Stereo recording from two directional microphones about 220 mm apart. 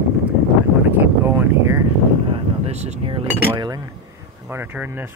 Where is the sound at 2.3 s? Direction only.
30° right (ahead or behind).